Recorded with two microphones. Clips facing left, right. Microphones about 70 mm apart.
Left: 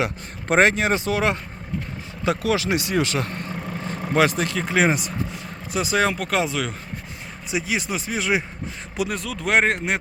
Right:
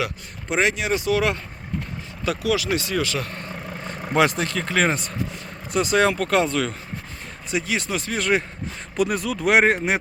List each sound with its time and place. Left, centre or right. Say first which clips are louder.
0.4 s speech: left 4 dB; left
2.4 s speech: right 2 dB; left
4.1 s speech: even; centre